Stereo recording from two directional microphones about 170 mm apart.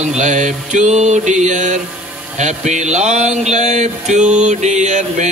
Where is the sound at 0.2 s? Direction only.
45° right (ahead or behind).